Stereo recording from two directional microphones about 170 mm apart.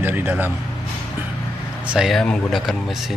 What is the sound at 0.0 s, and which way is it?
Speech, 10° right (ahead or behind).